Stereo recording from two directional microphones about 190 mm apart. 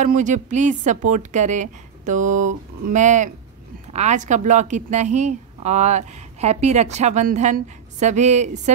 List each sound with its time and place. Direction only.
0.0 s a woman's voice: 40° right (ahead or behind)